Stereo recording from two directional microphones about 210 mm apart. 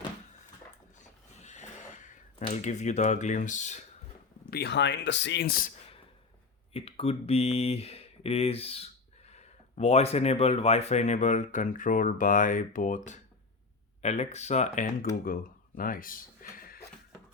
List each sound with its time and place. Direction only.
1.4 s a sound: 35° left (ahead or behind)
2.4 s speech: 35° left (ahead or behind)
4.5 s speech: 55° left (ahead or behind)
6.7 s speech: 25° left (ahead or behind)
15.2 s speech: 45° left (ahead or behind)